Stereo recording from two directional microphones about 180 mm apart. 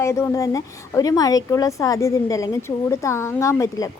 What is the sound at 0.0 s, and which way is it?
A woman's voice, 15° left (ahead or behind).